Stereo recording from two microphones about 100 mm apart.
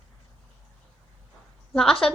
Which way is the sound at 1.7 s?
5° left (ahead or behind).